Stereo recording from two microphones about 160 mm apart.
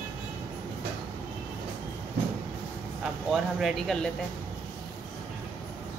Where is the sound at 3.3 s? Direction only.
Centre (ahead or behind).